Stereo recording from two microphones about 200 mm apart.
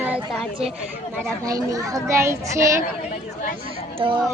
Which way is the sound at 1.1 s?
15° right (ahead or behind).